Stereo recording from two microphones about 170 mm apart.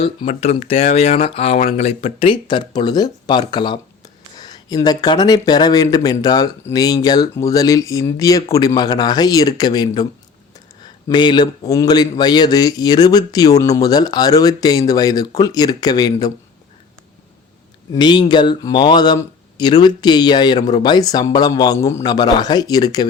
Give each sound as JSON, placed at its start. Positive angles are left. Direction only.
{"t": 0.0, "sound": "a man's voice", "side_deg": 35}
{"t": 17.9, "sound": "a man's voice", "side_deg": 25}